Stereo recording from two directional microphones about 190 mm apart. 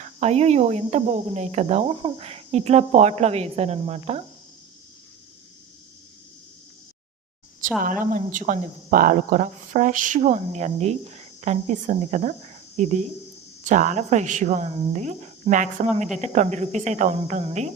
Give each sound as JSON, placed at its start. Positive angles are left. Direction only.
{"t": 0.0, "sound": "speech", "side_deg": -35}
{"t": 7.8, "sound": "speech", "side_deg": -45}